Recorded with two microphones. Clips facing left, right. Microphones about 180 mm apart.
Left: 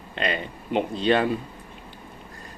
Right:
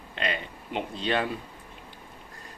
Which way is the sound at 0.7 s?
50° left (ahead or behind).